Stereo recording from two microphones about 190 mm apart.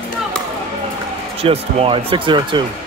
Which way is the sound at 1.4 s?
30° right (ahead or behind).